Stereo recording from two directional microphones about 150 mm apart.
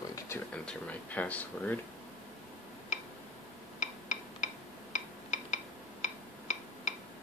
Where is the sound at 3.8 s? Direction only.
55° left (ahead or behind).